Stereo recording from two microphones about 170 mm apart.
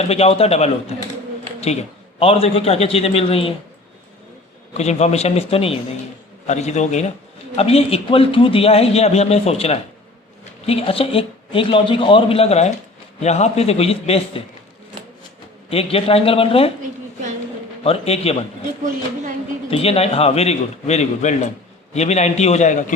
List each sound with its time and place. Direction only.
0.1 s a man's voice: 35° left (ahead or behind)
4.7 s a man's voice: 40° left (ahead or behind)
15.7 s a man's voice: 35° left (ahead or behind)
17.8 s a man's voice: 35° left (ahead or behind)
19.7 s a man's voice: 35° left (ahead or behind)